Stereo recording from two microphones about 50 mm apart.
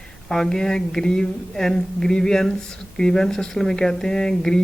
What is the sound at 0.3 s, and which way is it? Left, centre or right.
Speech, centre.